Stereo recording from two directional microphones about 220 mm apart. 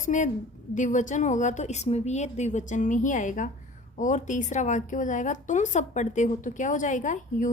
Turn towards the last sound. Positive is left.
turn(degrees=35)  # may be behind; listen again after turning